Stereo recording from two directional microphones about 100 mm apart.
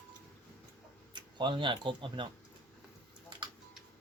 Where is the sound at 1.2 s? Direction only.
50° right (ahead or behind).